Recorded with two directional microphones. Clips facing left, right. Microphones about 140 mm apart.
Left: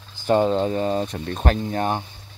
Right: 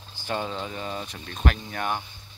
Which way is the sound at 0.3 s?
40° left (ahead or behind).